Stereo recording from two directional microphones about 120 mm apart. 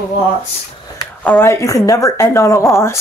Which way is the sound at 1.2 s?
25° left (ahead or behind).